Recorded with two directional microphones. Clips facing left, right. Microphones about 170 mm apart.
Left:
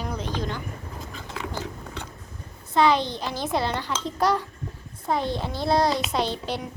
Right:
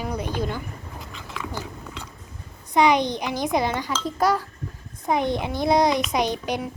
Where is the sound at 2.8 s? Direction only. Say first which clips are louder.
Right 2 dB; 15° right (ahead or behind).